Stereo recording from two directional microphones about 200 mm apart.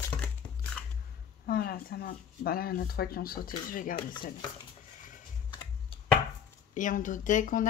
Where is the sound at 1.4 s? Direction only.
50° left (ahead or behind).